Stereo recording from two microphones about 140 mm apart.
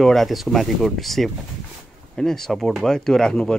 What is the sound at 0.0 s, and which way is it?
Speech, centre (ahead or behind).